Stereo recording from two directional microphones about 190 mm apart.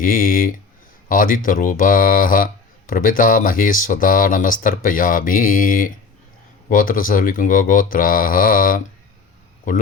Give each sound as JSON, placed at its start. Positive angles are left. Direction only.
{"t": 0.0, "sound": "speech", "side_deg": 45}